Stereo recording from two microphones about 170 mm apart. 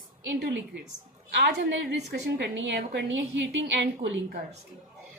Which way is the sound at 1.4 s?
90° right.